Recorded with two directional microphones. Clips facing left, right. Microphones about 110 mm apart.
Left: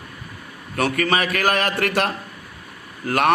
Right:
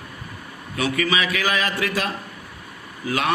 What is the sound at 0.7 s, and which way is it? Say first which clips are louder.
A man's voice: left 2 dB; 55° left (ahead or behind).